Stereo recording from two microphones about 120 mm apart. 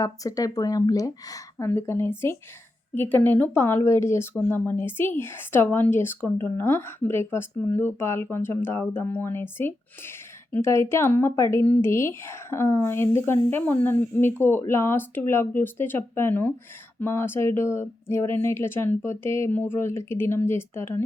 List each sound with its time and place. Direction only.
0.0 s speech: 30° left (ahead or behind)